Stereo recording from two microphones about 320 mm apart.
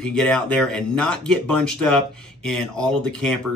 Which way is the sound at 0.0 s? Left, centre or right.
Centre.